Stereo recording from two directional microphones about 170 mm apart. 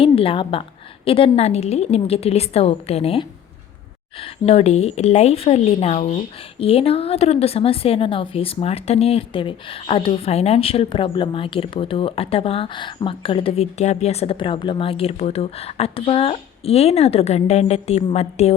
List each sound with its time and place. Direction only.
0.0 s a woman's voice: 35° left (ahead or behind)